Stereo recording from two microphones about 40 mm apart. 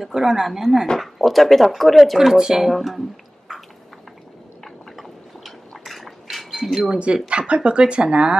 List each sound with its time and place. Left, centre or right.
0.0 s a woman's voice: centre
2.1 s a woman's voice: centre
2.7 s speech: centre
4.9 s liquid: centre
6.5 s a sound: centre
7.2 s speech: right